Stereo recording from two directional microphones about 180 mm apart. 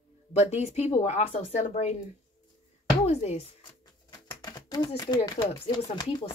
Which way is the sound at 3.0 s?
35° left (ahead or behind).